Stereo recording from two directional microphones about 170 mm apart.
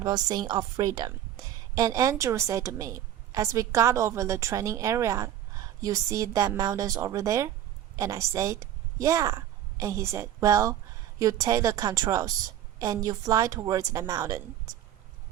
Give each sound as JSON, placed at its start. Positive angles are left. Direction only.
{"t": 0.0, "sound": "a woman's voice", "side_deg": -25}